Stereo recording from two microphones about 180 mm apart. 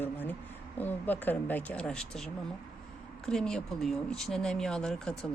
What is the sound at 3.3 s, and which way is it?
Speech, 5° left (ahead or behind).